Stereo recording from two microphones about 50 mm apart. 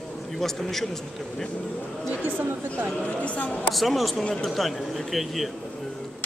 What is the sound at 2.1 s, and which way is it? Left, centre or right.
Speech, right.